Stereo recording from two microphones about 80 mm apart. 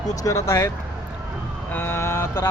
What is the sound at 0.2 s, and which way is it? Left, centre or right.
Speech, left.